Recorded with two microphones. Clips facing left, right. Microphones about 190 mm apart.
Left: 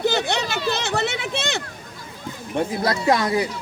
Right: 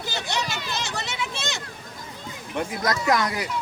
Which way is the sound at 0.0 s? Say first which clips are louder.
Left 8 dB; 60° left (ahead or behind).